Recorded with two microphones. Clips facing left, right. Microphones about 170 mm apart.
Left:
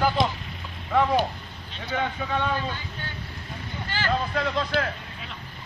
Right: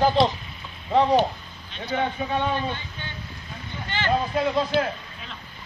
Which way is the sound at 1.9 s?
20° right (ahead or behind).